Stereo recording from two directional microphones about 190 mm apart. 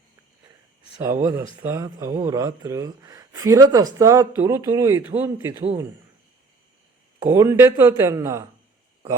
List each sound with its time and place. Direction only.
1.0 s speech: 15° right (ahead or behind)
7.3 s speech: 10° right (ahead or behind)